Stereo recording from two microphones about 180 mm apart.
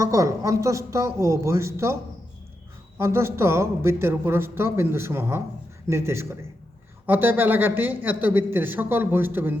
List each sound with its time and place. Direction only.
0.0 s a man's voice: 15° right (ahead or behind)
3.0 s a man's voice: 15° right (ahead or behind)